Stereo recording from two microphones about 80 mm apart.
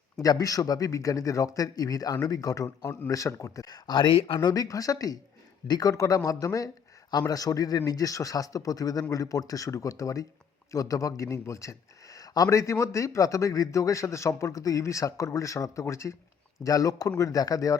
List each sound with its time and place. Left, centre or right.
0.2 s a man's voice: left
3.8 s speech: left
4.4 s a man's voice: left
5.6 s a man's voice: left
5.9 s a man's voice: left